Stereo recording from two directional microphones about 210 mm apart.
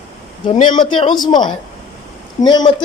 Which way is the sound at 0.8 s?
20° left (ahead or behind).